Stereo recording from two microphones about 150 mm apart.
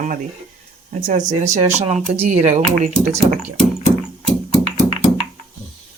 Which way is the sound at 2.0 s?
45° right (ahead or behind).